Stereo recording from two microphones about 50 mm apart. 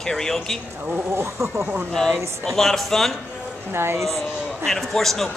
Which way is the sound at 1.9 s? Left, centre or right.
Centre.